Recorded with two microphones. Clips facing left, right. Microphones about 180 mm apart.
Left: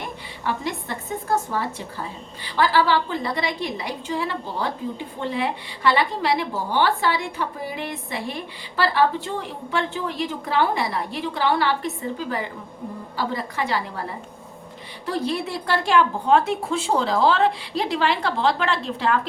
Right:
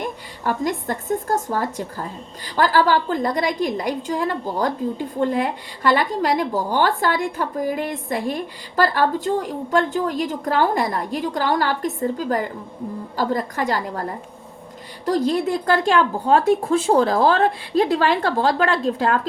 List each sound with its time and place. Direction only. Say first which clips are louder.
0.0 s a woman's voice: right 4 dB; 45° right (ahead or behind)
15.0 s a woman's voice: right 6 dB; 40° right (ahead or behind)